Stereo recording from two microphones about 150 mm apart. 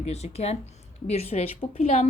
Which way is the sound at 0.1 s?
45° left (ahead or behind).